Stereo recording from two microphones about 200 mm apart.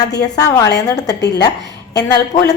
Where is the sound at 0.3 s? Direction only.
20° left (ahead or behind).